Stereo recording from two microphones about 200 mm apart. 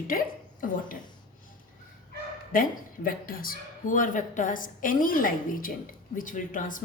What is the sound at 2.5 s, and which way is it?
A woman's voice, 45° left (ahead or behind).